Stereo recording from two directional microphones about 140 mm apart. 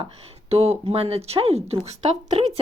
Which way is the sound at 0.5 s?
45° right (ahead or behind).